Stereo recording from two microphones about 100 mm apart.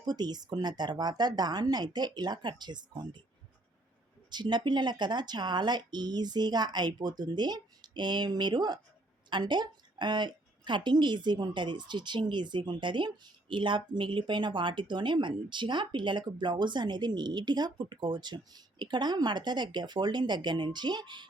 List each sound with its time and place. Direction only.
0.1 s a woman's voice: 45° right (ahead or behind)
4.3 s a woman's voice: 45° right (ahead or behind)